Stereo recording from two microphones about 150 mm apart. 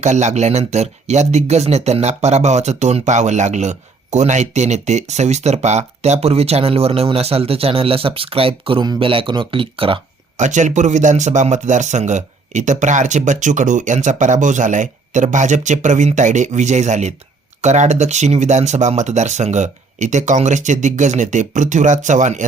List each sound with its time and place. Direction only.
0.0 s speech: 50° right (ahead or behind)
10.3 s speech: 55° right (ahead or behind)